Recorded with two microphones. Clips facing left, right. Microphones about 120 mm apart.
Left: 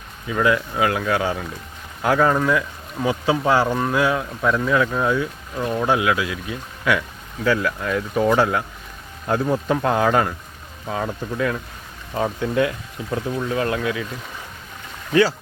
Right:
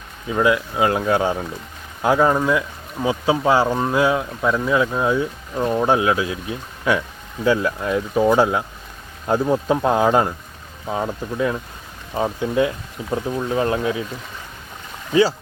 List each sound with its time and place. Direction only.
0.3 s speech: 20° right (ahead or behind)